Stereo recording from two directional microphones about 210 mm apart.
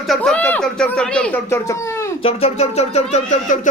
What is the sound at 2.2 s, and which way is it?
Speech, 25° left (ahead or behind).